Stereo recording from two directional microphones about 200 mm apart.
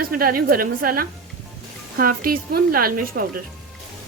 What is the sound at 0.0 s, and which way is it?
A woman's voice, 45° right (ahead or behind).